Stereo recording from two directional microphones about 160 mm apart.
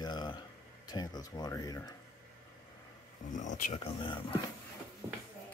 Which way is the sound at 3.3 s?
50° left (ahead or behind).